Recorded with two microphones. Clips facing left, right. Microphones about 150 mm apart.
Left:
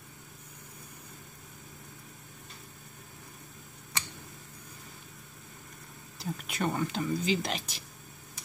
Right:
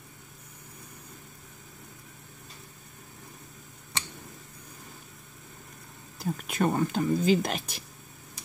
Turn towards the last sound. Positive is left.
turn(degrees=-50)  # may be behind; listen again after turning